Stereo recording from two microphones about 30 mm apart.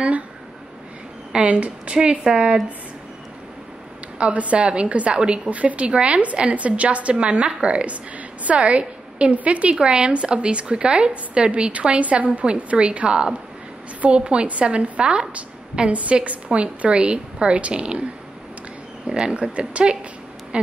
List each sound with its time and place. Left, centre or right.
1.4 s a woman's voice: right
2.3 s speech: centre
4.3 s a woman's voice: right
5.1 s a woman's voice: right
5.5 s a woman's voice: right
5.9 s a woman's voice: right
9.8 s a woman's voice: right
12.0 s a woman's voice: right
13.1 s a woman's voice: right
15.9 s a woman's voice: right
19.0 s a woman's voice: right